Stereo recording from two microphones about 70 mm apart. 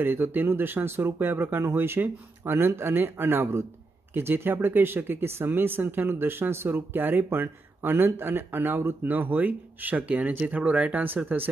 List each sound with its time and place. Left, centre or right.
0.0 s speech: right